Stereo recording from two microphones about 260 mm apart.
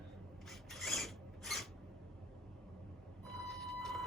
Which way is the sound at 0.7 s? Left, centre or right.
Centre.